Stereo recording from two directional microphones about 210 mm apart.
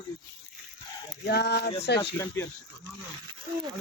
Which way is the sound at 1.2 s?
50° left (ahead or behind).